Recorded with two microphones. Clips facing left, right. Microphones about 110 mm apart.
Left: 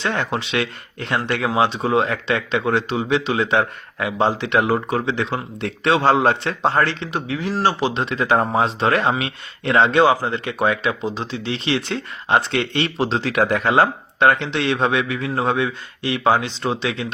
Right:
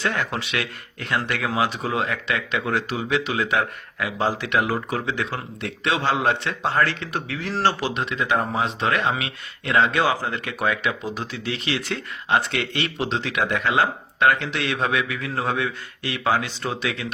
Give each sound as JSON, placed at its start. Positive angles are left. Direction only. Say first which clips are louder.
{"t": 0.0, "sound": "speech", "louder": "left 3 dB", "side_deg": 25}
{"t": 7.1, "sound": "speech", "louder": "left 4 dB", "side_deg": 20}
{"t": 7.9, "sound": "speech", "louder": "left 4 dB", "side_deg": 30}